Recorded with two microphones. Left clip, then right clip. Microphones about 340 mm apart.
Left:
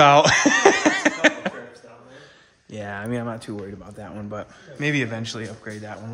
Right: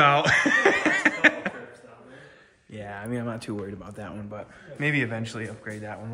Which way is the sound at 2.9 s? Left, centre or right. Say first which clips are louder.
Left 5 dB; left.